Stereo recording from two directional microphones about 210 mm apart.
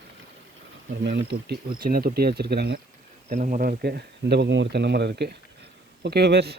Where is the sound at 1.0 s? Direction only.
55° right (ahead or behind).